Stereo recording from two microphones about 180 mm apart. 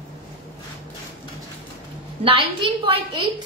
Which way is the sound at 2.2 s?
30° right (ahead or behind).